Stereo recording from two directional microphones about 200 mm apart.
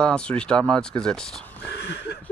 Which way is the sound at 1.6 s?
55° left (ahead or behind).